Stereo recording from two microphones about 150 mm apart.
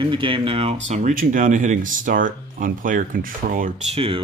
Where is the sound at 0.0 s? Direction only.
35° right (ahead or behind); by 3.7 s 65° right (ahead or behind).